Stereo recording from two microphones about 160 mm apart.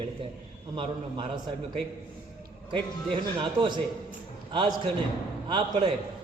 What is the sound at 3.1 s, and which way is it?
Speech, 30° right (ahead or behind).